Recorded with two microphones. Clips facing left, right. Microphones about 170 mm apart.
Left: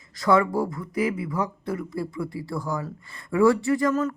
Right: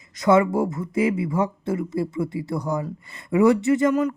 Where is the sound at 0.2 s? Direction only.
20° right (ahead or behind).